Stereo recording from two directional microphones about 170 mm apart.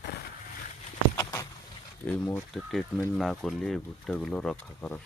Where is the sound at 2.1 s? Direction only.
10° left (ahead or behind).